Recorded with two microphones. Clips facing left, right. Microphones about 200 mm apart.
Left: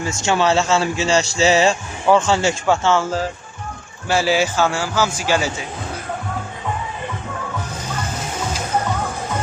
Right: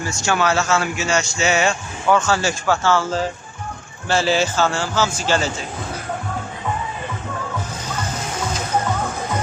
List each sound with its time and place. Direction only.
0.0 s a man's voice: 25° left (ahead or behind)
4.1 s a man's voice: 10° left (ahead or behind)